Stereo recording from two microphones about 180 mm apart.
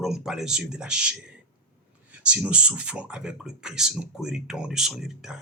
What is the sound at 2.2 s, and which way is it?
Speech, 5° right (ahead or behind).